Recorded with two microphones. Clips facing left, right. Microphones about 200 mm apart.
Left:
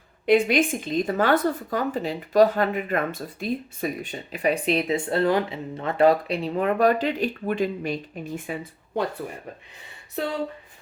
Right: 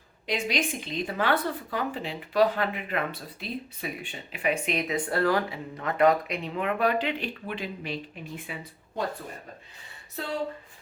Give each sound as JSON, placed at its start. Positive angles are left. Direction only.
{"t": 0.3, "sound": "speech", "side_deg": 55}